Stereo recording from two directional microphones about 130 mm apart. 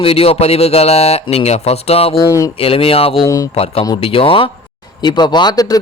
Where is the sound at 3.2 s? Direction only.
30° left (ahead or behind).